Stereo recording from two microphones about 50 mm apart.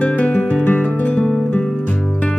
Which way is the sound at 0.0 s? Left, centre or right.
Left.